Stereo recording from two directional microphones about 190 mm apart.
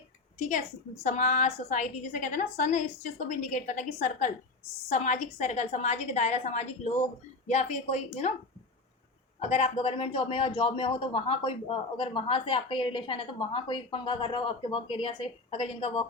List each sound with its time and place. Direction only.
0.3 s a woman's voice: 40° left (ahead or behind)
9.5 s speech: 35° left (ahead or behind)